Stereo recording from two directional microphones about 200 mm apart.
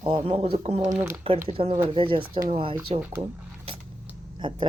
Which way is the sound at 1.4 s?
30° right (ahead or behind).